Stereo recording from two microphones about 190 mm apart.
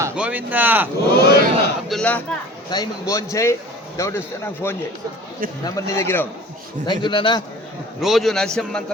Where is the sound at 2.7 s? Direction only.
20° left (ahead or behind).